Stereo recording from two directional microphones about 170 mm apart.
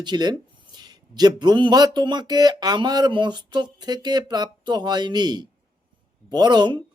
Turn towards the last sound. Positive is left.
turn(degrees=-25)  # may be behind; listen again after turning